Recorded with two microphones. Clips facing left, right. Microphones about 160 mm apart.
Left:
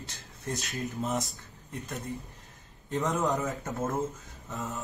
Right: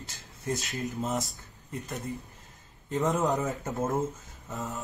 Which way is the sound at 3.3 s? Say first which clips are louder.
Right 1 dB; 20° right (ahead or behind).